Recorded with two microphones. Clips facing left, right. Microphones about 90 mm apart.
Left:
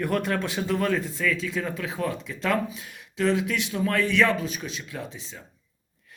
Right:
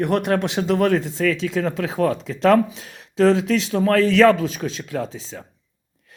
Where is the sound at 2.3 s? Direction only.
65° right (ahead or behind).